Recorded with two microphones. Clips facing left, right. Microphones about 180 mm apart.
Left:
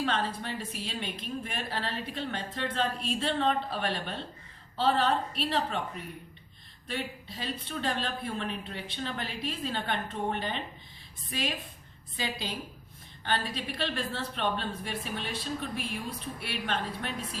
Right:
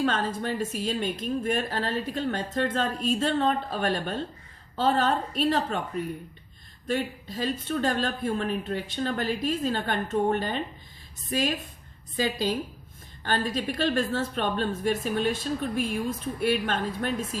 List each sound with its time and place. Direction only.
0.0 s speech: 45° right (ahead or behind)
6.8 s speech: 45° right (ahead or behind)